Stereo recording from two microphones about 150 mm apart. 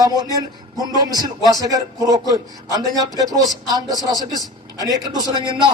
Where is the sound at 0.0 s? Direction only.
25° right (ahead or behind).